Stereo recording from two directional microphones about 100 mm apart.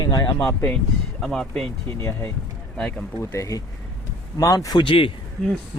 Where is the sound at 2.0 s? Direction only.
25° left (ahead or behind); by 5.1 s 55° left (ahead or behind).